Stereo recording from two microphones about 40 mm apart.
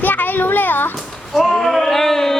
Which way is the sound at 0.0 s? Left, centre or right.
Left.